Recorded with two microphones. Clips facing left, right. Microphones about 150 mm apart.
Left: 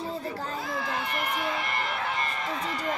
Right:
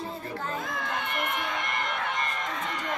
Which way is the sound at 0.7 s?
5° left (ahead or behind).